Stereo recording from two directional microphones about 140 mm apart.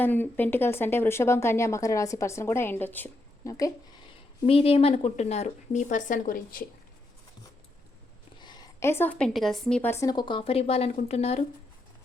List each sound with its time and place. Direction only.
0.0 s speech: 15° left (ahead or behind)
4.4 s speech: 45° left (ahead or behind); by 6.7 s 90° left
8.4 s a woman's voice: 30° left (ahead or behind); by 9.9 s 5° left (ahead or behind)
9.9 s speech: 25° left (ahead or behind); by 11.4 s 50° left (ahead or behind)